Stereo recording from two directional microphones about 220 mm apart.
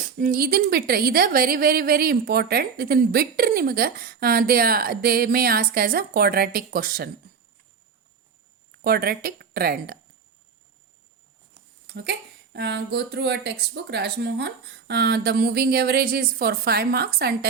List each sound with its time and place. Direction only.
0.2 s a woman's voice: 40° right (ahead or behind)
8.8 s a woman's voice: 45° right (ahead or behind)
12.5 s a woman's voice: 50° right (ahead or behind)